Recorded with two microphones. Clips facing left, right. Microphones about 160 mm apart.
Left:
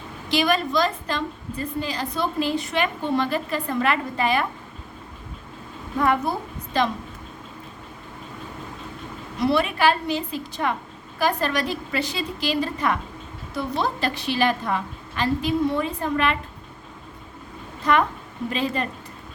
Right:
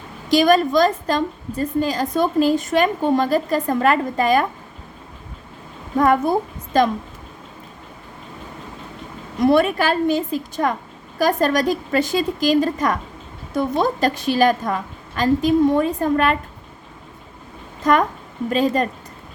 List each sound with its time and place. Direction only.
0.3 s a woman's voice: 40° right (ahead or behind)
6.0 s a woman's voice: 45° right (ahead or behind)
9.4 s a woman's voice: 45° right (ahead or behind)
17.8 s a woman's voice: 45° right (ahead or behind)